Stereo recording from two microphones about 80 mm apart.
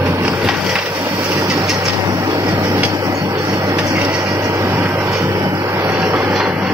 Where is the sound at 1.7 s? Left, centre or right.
Right.